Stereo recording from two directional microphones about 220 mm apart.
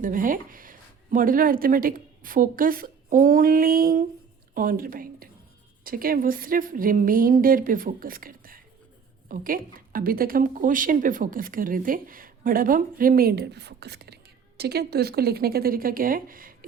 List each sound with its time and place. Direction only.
0.0 s speech: 40° right (ahead or behind)